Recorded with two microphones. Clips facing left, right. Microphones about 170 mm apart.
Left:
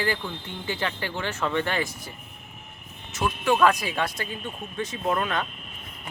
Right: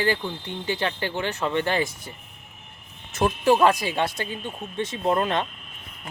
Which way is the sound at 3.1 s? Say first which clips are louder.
Right 4 dB; 35° right (ahead or behind).